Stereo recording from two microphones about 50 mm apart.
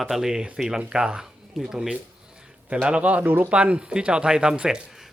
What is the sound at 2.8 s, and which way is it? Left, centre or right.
Speech, right.